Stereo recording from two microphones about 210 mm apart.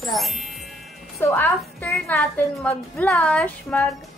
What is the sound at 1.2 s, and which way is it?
A woman's voice, 10° left (ahead or behind).